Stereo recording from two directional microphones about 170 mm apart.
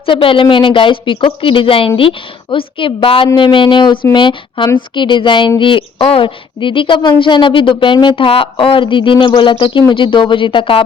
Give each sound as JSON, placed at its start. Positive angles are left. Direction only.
{"t": 0.0, "sound": "a woman's voice", "side_deg": 30}